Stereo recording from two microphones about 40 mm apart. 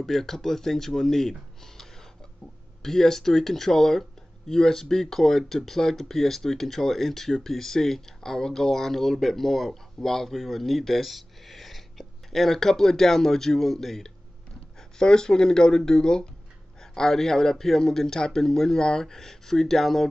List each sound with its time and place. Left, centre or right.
0.0 s speech: centre
14.8 s speech: centre